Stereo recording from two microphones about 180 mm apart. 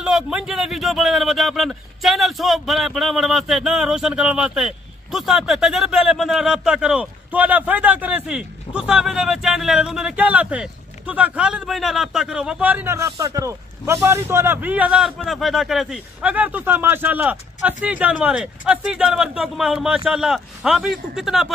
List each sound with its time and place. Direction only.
0.0 s speech: 5° right (ahead or behind)